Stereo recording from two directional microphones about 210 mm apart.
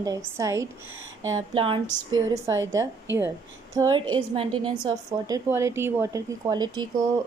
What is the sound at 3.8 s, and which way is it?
A woman's voice, 20° right (ahead or behind).